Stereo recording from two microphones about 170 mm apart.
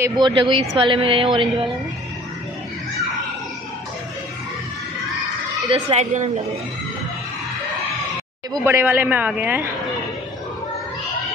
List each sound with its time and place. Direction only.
0.2 s speech: 30° right (ahead or behind)
5.7 s speech: 40° right (ahead or behind)
8.6 s speech: 10° right (ahead or behind)